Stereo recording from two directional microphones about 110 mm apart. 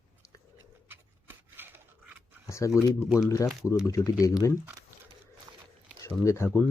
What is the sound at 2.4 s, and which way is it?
Speech, 25° left (ahead or behind).